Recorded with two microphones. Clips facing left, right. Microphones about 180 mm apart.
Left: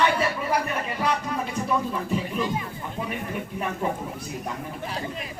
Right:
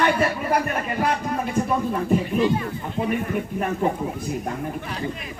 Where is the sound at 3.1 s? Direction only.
50° right (ahead or behind).